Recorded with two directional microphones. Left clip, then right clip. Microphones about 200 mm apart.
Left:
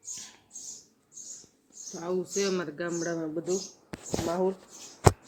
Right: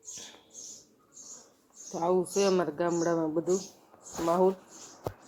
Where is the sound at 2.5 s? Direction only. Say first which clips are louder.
Right 4 dB; centre (ahead or behind).